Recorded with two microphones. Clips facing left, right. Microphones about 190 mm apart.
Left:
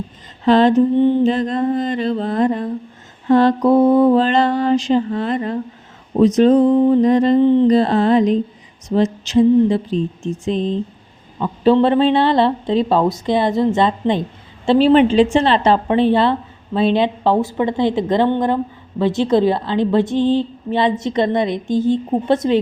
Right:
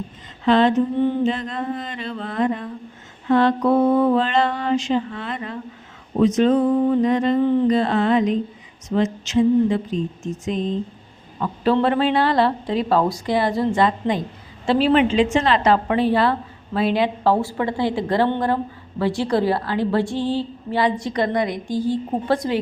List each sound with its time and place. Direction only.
0.4 s mantra: 40° left (ahead or behind)
7.0 s mantra: 35° left (ahead or behind)
11.3 s a woman's voice: 20° left (ahead or behind)